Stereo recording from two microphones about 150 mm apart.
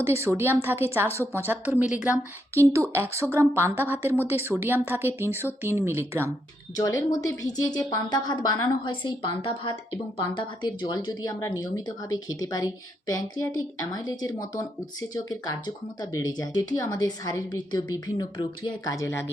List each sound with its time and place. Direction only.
0.0 s speech: 15° right (ahead or behind)
2.6 s speech: 20° right (ahead or behind)
6.7 s a woman's voice: 25° left (ahead or behind)